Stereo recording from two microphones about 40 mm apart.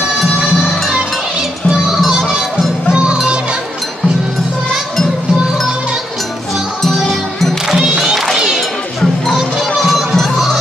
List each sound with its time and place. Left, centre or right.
1.7 s music: centre
2.9 s music: right
7.6 s music: centre
8.0 s crowd: centre
8.5 s music: centre
9.4 s music: centre
10.1 s music: centre